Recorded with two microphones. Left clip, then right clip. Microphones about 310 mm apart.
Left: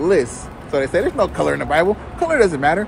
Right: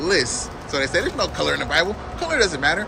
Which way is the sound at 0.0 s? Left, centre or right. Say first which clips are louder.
Left 4 dB; centre.